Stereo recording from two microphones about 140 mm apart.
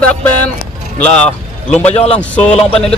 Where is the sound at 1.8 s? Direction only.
50° left (ahead or behind).